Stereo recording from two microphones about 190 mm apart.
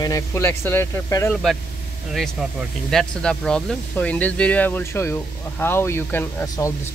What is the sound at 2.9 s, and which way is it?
Speech, 5° left (ahead or behind).